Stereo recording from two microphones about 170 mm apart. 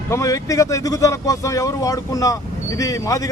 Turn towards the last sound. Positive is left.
turn(degrees=20)  # may be behind; listen again after turning